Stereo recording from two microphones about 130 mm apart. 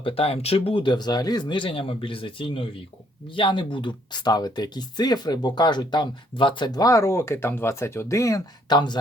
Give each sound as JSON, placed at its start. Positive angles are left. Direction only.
{"t": 0.0, "sound": "speech", "side_deg": 45}
{"t": 8.7, "sound": "speech", "side_deg": 35}